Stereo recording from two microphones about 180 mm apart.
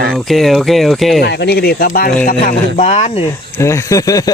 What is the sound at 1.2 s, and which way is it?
Speech, 65° left (ahead or behind).